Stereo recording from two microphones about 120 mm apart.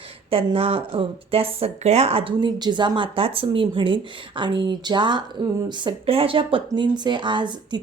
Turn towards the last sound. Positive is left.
turn(degrees=-40)  # may be behind; listen again after turning